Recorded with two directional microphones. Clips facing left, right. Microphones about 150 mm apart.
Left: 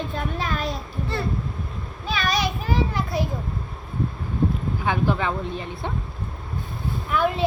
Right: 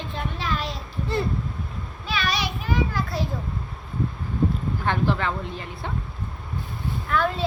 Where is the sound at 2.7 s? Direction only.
20° left (ahead or behind).